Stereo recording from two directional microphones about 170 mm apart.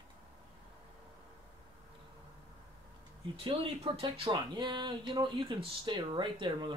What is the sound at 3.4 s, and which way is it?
Speech, 35° right (ahead or behind).